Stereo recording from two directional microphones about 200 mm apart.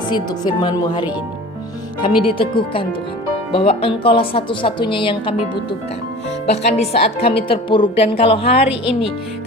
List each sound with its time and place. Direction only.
0.1 s speech: 20° left (ahead or behind)
6.4 s speech: 30° left (ahead or behind)